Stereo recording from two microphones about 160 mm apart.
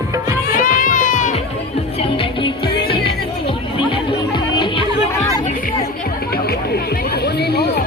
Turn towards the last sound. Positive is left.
turn(degrees=90)